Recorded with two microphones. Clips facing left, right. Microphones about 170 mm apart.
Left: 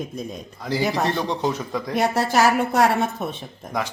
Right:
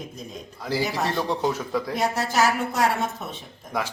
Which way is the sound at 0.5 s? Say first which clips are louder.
Left 3 dB; 5° right (ahead or behind).